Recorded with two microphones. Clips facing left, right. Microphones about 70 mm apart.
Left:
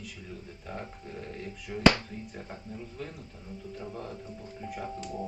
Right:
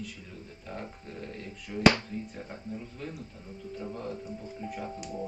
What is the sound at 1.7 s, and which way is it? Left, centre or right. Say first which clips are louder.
Speech: right 3 dB; centre.